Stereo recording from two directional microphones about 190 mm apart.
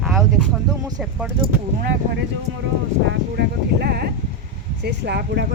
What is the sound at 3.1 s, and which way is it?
Speech, 60° right (ahead or behind).